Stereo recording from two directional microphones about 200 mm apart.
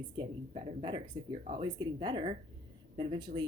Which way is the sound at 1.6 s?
20° right (ahead or behind).